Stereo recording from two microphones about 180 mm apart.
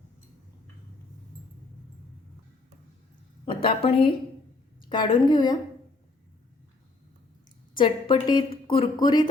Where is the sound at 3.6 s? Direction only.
30° left (ahead or behind).